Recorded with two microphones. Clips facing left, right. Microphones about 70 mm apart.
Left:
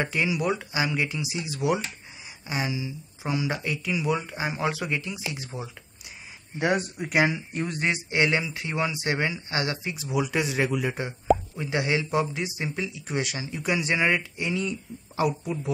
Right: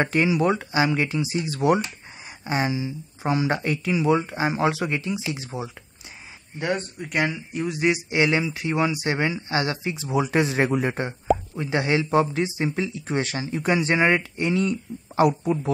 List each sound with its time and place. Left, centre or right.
0.0 s speech: right
1.6 s speech: right
3.8 s speech: right
6.6 s speech: centre
8.1 s speech: right